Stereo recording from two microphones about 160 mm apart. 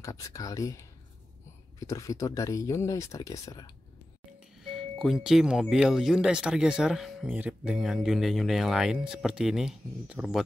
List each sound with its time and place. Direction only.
0.0 s speech: 20° left (ahead or behind)
4.6 s speech: centre (ahead or behind)